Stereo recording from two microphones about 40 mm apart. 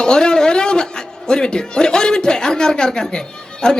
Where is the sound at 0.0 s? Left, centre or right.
Centre.